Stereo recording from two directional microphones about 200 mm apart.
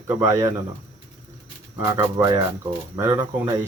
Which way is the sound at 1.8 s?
15° right (ahead or behind).